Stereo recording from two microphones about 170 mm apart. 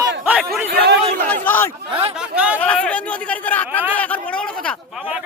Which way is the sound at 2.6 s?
10° left (ahead or behind).